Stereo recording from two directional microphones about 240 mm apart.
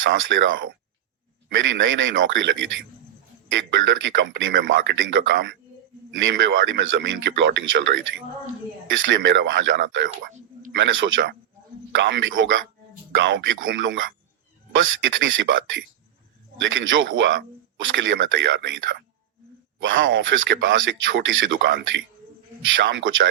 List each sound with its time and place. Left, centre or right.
0.0 s speech: right
3.5 s speech: right
9.0 s speech: right